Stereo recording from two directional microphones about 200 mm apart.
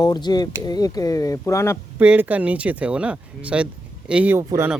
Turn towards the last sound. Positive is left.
turn(degrees=-10)  # may be behind; listen again after turning